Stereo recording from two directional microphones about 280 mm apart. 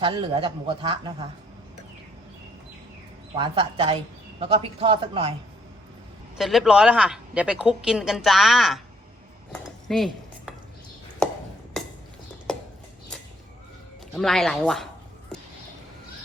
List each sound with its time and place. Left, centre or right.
0.0 s a man's voice: centre
3.3 s speech: centre
6.3 s a woman's voice: centre
9.5 s dishes: centre
14.2 s a woman's voice: centre